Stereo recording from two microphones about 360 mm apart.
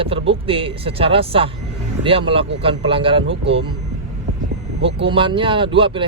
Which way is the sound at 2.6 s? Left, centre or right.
Centre.